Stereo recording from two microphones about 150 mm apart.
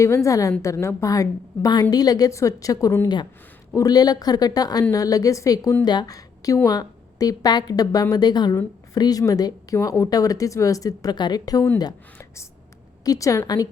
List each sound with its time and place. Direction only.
0.0 s a woman's voice: 20° left (ahead or behind)
13.1 s a woman's voice: 20° left (ahead or behind)